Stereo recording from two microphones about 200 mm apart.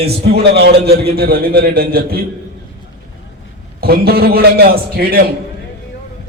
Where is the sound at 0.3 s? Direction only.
55° right (ahead or behind).